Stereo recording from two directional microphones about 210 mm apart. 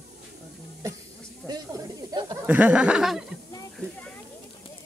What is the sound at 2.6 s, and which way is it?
Speech, 5° right (ahead or behind).